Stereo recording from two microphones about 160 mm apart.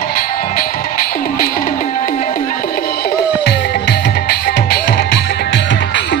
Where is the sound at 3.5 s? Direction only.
90° left.